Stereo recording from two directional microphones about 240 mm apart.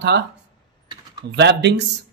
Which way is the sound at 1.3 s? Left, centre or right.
Right.